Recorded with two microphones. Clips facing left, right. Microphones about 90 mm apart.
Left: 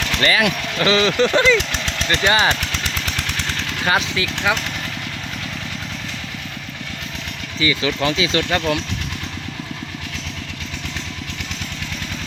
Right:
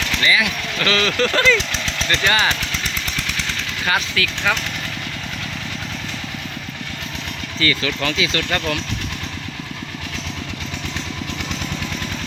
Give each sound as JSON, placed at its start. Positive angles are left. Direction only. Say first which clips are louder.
{"t": 0.2, "sound": "speech", "louder": "left 2 dB", "side_deg": 50}
{"t": 0.8, "sound": "speech", "louder": "left 3 dB", "side_deg": 20}
{"t": 3.8, "sound": "speech", "louder": "left 2 dB", "side_deg": 25}
{"t": 7.6, "sound": "speech", "louder": "left 2 dB", "side_deg": 20}
{"t": 8.4, "sound": "speech", "louder": "left 3 dB", "side_deg": 15}